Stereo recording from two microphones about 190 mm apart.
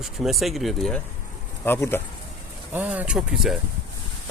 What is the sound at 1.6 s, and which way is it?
Speech, 10° left (ahead or behind).